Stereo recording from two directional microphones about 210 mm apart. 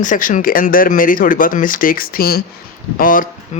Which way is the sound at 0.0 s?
40° left (ahead or behind).